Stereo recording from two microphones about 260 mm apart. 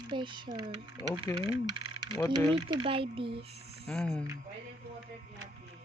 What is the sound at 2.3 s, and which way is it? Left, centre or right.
Speech, centre.